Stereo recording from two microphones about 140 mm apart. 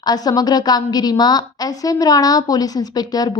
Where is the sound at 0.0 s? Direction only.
30° left (ahead or behind).